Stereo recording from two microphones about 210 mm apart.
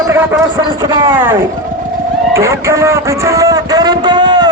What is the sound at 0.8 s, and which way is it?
Speech, 20° right (ahead or behind).